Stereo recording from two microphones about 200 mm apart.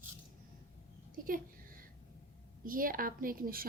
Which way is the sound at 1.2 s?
45° right (ahead or behind).